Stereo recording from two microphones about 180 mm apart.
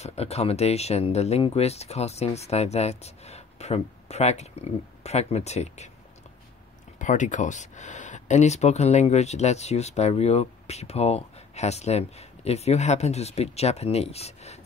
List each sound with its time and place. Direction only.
0.0 s speech: 35° left (ahead or behind)
7.0 s speech: 45° left (ahead or behind)